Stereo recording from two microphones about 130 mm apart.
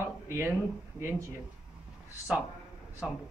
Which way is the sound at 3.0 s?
5° right (ahead or behind).